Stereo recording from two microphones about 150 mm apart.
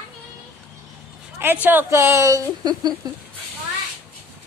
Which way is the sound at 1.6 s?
15° right (ahead or behind).